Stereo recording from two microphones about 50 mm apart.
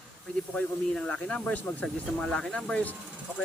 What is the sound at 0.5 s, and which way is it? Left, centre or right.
Speech, left.